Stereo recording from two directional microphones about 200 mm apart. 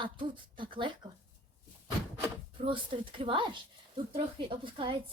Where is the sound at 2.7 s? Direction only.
25° right (ahead or behind).